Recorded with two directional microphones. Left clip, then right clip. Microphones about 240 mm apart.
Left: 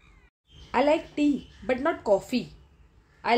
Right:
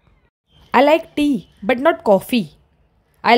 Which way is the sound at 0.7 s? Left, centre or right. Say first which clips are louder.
Right 10 dB; right.